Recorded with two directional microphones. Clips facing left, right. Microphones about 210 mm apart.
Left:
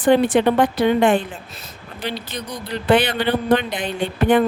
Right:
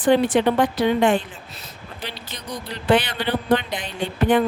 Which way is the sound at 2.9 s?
55° left (ahead or behind).